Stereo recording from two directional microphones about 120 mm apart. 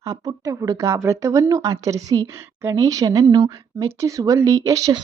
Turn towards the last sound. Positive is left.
turn(degrees=-30)  # may be behind; listen again after turning